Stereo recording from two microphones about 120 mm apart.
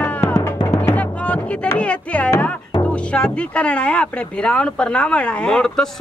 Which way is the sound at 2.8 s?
10° left (ahead or behind).